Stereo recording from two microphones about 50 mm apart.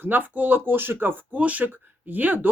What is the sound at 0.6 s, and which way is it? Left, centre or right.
Speech, right.